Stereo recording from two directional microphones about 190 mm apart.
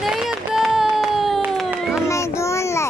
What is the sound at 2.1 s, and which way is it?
Child singing, 15° left (ahead or behind).